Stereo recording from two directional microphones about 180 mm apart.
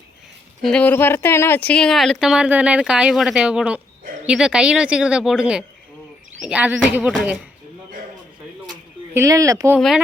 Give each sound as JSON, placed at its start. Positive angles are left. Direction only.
{"t": 0.6, "sound": "speech", "side_deg": 5}
{"t": 9.1, "sound": "speech", "side_deg": -15}
{"t": 9.7, "sound": "speech", "side_deg": -5}